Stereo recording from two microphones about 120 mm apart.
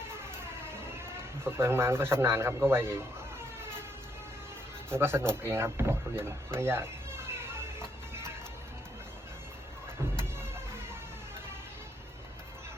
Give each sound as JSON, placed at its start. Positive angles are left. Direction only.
{"t": 1.5, "sound": "a man's voice", "side_deg": -20}
{"t": 4.9, "sound": "a man's voice", "side_deg": -20}
{"t": 7.8, "sound": "music", "side_deg": -20}